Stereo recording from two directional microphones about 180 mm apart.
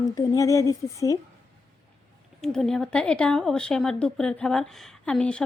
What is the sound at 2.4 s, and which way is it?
Speech, 5° left (ahead or behind).